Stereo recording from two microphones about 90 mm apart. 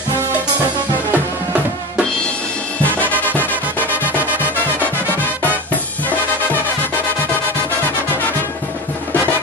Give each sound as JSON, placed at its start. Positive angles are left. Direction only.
{"t": 1.1, "sound": "drum", "side_deg": -15}
{"t": 3.0, "sound": "music", "side_deg": 20}
{"t": 5.5, "sound": "music", "side_deg": 20}